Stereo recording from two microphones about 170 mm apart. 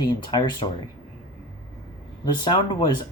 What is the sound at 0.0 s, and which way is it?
Speech, 25° left (ahead or behind).